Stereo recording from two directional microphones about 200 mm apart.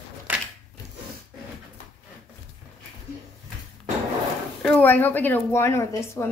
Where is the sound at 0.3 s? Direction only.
10° right (ahead or behind).